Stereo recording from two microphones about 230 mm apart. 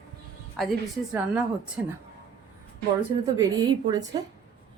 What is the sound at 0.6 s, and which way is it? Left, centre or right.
A woman's voice, centre.